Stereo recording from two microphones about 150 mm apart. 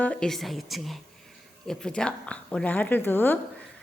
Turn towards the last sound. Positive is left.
turn(degrees=15)  # may be behind; listen again after turning